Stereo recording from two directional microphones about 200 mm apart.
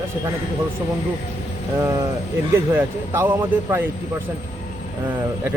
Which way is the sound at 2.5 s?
15° right (ahead or behind).